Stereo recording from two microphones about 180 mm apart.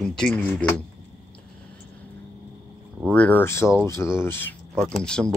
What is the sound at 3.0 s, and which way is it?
Speech, 5° left (ahead or behind).